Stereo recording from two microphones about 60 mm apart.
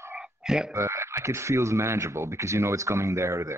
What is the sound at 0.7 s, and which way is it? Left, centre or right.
Speech, right.